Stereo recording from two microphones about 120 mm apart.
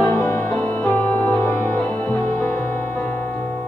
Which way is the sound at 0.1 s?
20° left (ahead or behind).